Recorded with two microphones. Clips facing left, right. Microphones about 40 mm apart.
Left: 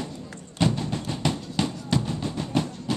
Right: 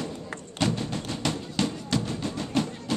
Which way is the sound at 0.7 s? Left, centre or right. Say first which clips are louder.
Left 1 dB; centre.